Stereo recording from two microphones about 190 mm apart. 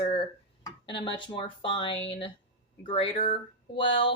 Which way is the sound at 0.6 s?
25° left (ahead or behind).